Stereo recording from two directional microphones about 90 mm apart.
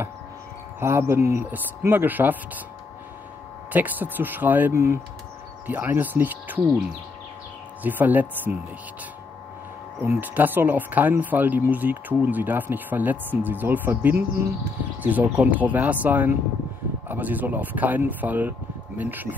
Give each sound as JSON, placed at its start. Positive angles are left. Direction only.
{"t": 0.7, "sound": "speech", "side_deg": -30}
{"t": 3.7, "sound": "speech", "side_deg": -20}
{"t": 5.7, "sound": "speech", "side_deg": -20}
{"t": 7.8, "sound": "speech", "side_deg": -20}
{"t": 10.2, "sound": "speech", "side_deg": -20}